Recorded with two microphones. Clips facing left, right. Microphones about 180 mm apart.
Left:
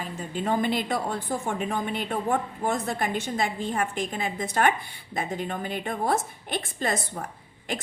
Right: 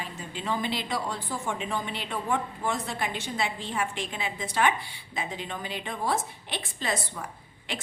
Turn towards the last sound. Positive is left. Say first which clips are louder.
# left 4 dB
turn(degrees=45)  # may be behind; listen again after turning